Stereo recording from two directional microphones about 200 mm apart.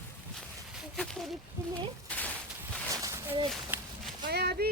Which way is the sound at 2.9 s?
15° right (ahead or behind).